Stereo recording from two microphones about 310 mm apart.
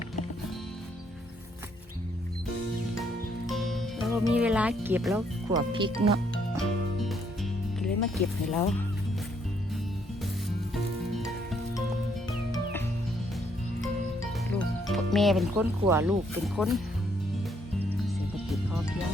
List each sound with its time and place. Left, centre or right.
3.4 s music: centre
4.3 s speech: centre
5.7 s speech: centre
6.6 s music: centre
7.8 s speech: centre
14.5 s speech: centre
18.5 s music: centre